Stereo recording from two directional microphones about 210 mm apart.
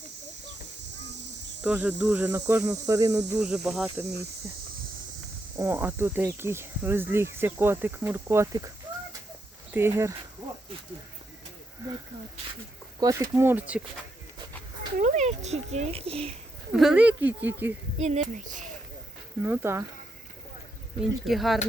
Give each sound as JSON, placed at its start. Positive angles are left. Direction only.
{"t": 1.6, "sound": "speech", "side_deg": -10}
{"t": 3.4, "sound": "speech", "side_deg": -5}
{"t": 5.5, "sound": "speech", "side_deg": -10}
{"t": 9.7, "sound": "speech", "side_deg": -10}
{"t": 13.0, "sound": "speech", "side_deg": -15}
{"t": 14.9, "sound": "a child's voice", "side_deg": -35}
{"t": 16.7, "sound": "speech", "side_deg": -5}
{"t": 18.0, "sound": "a child's voice", "side_deg": -35}
{"t": 19.4, "sound": "speech", "side_deg": -10}
{"t": 21.0, "sound": "speech", "side_deg": 0}